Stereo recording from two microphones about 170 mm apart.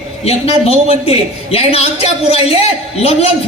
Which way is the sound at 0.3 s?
35° left (ahead or behind).